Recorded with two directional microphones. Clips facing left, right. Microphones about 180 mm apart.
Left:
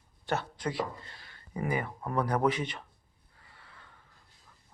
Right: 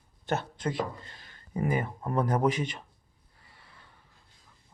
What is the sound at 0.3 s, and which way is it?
Speech, 25° right (ahead or behind).